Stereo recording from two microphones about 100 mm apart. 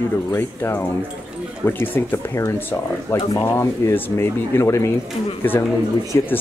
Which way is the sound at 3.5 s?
25° left (ahead or behind).